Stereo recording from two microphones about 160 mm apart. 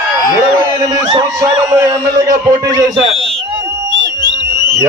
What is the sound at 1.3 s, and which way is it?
A man's voice, 20° right (ahead or behind).